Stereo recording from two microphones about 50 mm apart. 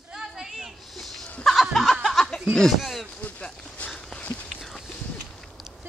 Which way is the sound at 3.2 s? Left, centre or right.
Left.